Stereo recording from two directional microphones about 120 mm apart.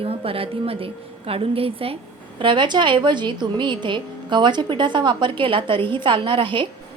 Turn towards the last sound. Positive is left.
turn(degrees=-45)  # may be behind; listen again after turning